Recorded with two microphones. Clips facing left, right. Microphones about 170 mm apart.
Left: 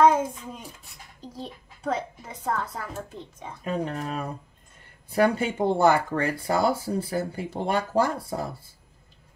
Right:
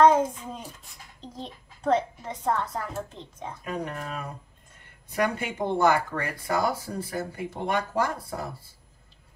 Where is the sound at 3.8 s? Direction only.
30° left (ahead or behind).